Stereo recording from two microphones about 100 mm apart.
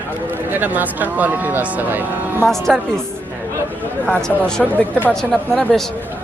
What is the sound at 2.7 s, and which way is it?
Speech, 5° left (ahead or behind).